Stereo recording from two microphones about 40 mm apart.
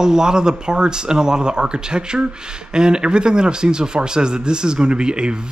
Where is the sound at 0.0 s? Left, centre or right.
Centre.